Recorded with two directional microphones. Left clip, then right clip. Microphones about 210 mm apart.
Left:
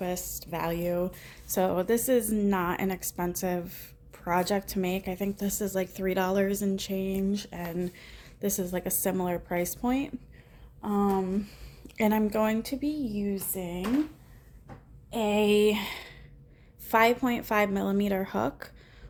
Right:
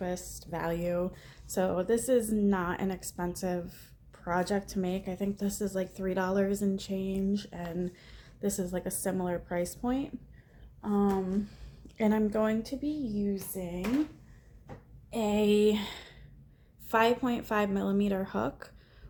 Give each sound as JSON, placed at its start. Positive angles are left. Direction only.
{"t": 0.0, "sound": "a woman's voice", "side_deg": 20}
{"t": 15.1, "sound": "a woman's voice", "side_deg": 10}